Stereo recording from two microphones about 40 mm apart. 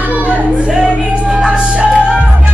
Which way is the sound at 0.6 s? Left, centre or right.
Right.